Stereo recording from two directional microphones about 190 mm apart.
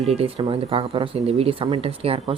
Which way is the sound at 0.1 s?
30° right (ahead or behind).